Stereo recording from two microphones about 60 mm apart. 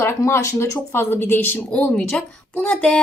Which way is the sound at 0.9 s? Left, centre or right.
Left.